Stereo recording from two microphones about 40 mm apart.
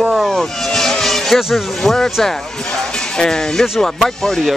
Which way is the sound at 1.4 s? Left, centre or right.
Centre.